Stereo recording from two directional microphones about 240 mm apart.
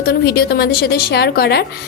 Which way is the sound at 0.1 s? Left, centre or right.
Left.